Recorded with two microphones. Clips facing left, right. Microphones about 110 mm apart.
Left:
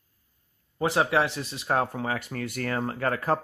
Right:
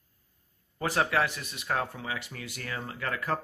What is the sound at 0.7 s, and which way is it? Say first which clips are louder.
Speech: left 4 dB; 20° left (ahead or behind).